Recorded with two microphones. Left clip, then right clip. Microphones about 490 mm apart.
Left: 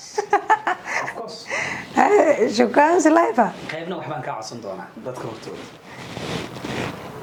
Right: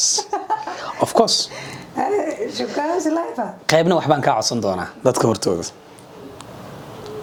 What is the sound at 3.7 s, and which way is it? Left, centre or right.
Speech, right.